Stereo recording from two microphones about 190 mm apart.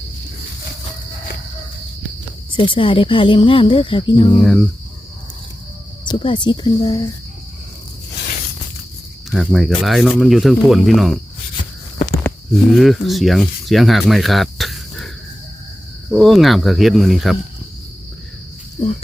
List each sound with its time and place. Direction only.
2.6 s speech: 25° left (ahead or behind)
4.4 s speech: centre (ahead or behind)
6.1 s speech: 25° left (ahead or behind)
9.3 s speech: centre (ahead or behind)
12.6 s speech: centre (ahead or behind)
16.1 s speech: centre (ahead or behind)